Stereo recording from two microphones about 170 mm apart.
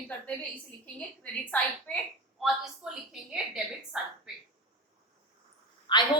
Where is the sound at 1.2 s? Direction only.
10° left (ahead or behind).